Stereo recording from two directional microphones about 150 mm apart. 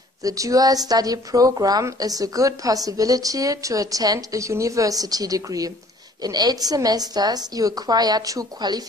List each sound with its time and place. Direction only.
0.2 s speech: 25° right (ahead or behind)